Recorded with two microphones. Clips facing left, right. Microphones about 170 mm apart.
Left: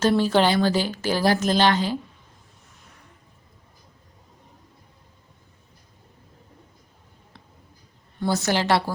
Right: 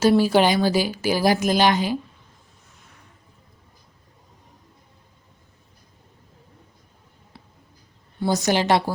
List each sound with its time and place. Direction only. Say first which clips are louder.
0.0 s speech: right 2 dB; 10° right (ahead or behind)
7.3 s a sound: right 3 dB; 5° right (ahead or behind)
8.3 s speech: right 2 dB; 15° right (ahead or behind)